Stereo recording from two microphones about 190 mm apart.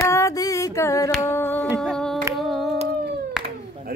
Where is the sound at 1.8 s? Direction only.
5° left (ahead or behind).